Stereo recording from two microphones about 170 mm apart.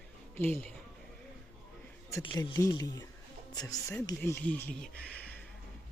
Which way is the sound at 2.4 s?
20° left (ahead or behind).